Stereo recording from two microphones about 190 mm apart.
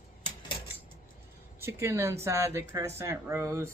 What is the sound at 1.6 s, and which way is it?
Speech, 15° right (ahead or behind).